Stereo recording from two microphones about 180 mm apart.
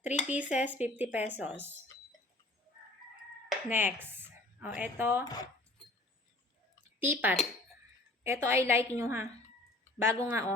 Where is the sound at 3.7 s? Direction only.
10° right (ahead or behind).